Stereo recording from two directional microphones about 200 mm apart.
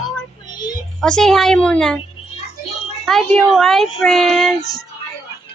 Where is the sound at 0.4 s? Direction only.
20° left (ahead or behind).